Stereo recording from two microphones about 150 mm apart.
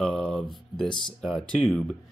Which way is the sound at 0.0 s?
5° left (ahead or behind).